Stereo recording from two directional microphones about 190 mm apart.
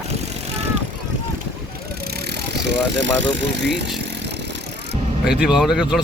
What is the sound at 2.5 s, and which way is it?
Speech, 65° right (ahead or behind).